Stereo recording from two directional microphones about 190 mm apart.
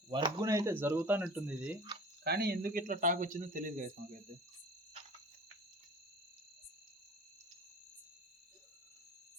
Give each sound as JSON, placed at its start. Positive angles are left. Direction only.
{"t": 0.1, "sound": "speech", "side_deg": -25}
{"t": 2.2, "sound": "speech", "side_deg": -55}